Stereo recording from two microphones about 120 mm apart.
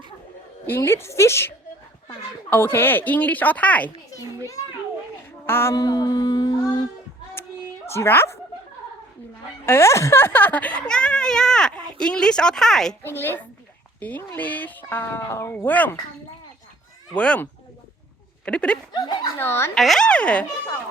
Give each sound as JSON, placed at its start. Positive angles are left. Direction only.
{"t": 0.7, "sound": "a woman's voice", "side_deg": 20}
{"t": 5.5, "sound": "a woman's voice", "side_deg": 20}
{"t": 5.7, "sound": "speech", "side_deg": 30}
{"t": 7.9, "sound": "a woman's voice", "side_deg": 20}
{"t": 9.6, "sound": "speech", "side_deg": 20}
{"t": 13.0, "sound": "a woman's voice", "side_deg": 20}
{"t": 17.2, "sound": "speech", "side_deg": 10}
{"t": 18.9, "sound": "speech", "side_deg": 35}
{"t": 19.4, "sound": "a woman's voice", "side_deg": 20}
{"t": 19.7, "sound": "speech", "side_deg": 5}